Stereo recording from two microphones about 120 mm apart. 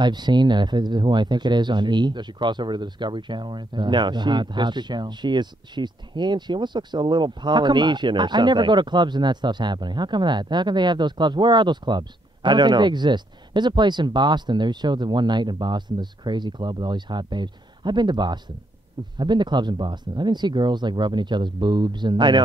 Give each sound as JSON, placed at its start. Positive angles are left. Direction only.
{"t": 0.0, "sound": "speech", "side_deg": -40}